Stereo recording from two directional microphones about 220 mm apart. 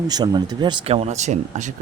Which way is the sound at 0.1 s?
20° right (ahead or behind).